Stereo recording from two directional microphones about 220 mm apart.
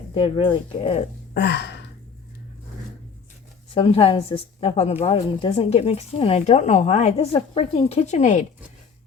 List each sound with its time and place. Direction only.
0.1 s a woman's voice: 25° left (ahead or behind)
1.3 s speech: 50° left (ahead or behind)
3.8 s a woman's voice: 25° left (ahead or behind)